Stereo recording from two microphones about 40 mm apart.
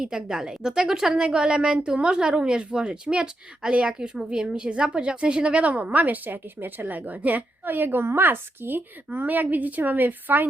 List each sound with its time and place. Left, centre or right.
0.0 s a woman's voice: centre; by 7.2 s right
7.6 s a woman's voice: right
8.0 s speech: right
9.1 s a woman's voice: right